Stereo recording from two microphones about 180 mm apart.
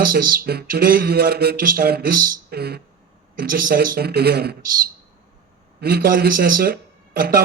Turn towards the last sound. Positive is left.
turn(degrees=-60)  # may be behind; listen again after turning